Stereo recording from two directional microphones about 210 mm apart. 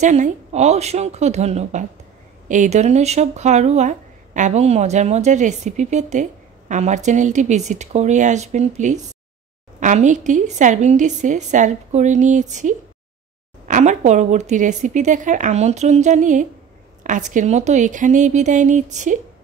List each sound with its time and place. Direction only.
0.0 s speech: 35° right (ahead or behind)